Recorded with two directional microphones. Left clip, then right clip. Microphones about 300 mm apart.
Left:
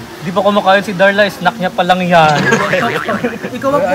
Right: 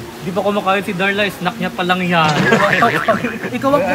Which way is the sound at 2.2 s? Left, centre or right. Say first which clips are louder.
Left 2 dB; centre.